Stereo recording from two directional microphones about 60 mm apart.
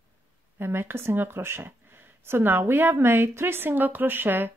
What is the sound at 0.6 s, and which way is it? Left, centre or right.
A woman's voice, right.